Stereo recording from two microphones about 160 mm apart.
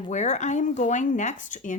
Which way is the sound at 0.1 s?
45° left (ahead or behind).